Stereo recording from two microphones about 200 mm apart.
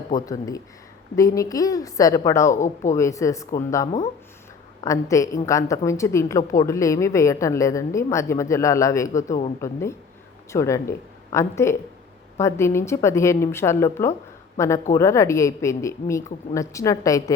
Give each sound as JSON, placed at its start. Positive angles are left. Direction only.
{"t": 0.3, "sound": "a woman's voice", "side_deg": 15}